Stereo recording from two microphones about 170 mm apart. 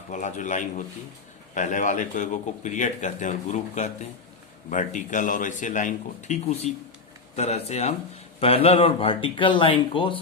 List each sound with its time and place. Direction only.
0.1 s a man's voice: 45° left (ahead or behind)